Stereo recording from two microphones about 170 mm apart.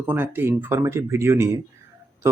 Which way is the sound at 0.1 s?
15° right (ahead or behind).